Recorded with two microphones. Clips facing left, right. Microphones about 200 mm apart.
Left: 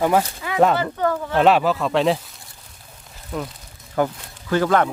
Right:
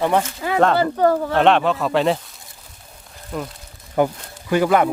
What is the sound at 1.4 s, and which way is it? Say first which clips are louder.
Speech: left 2 dB; 5° left (ahead or behind).